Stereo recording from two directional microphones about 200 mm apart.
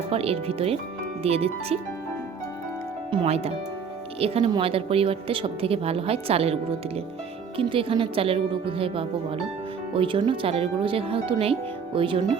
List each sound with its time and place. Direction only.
0.1 s a woman's voice: 30° right (ahead or behind)
3.1 s a woman's voice: 30° right (ahead or behind)